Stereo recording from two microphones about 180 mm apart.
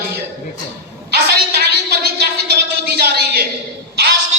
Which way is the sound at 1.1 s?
60° right (ahead or behind).